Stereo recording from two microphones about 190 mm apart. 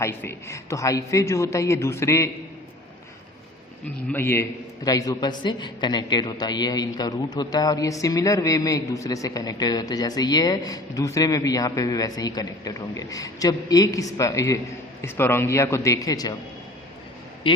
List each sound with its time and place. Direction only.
0.0 s a woman's voice: 15° left (ahead or behind)
4.1 s a man's voice: 10° left (ahead or behind)
17.5 s a man's voice: 25° left (ahead or behind)